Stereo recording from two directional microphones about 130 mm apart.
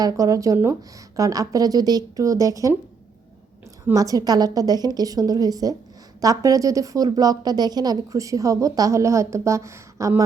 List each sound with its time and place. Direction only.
0.0 s a woman's voice: 25° right (ahead or behind)
3.9 s a woman's voice: 30° right (ahead or behind)